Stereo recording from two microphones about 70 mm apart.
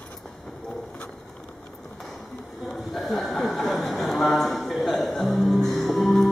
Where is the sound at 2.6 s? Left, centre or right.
Centre.